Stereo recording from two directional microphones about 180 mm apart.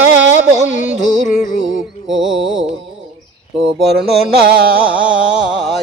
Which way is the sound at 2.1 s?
Centre (ahead or behind).